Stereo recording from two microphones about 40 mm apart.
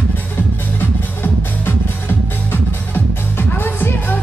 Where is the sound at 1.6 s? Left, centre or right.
Left.